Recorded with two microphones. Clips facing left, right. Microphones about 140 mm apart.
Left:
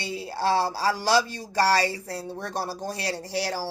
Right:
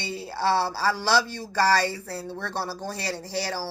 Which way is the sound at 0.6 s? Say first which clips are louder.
Even; 15° left (ahead or behind).